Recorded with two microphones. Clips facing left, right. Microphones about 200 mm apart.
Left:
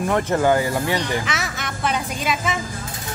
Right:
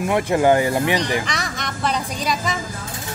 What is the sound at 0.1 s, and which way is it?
Speech, 15° right (ahead or behind).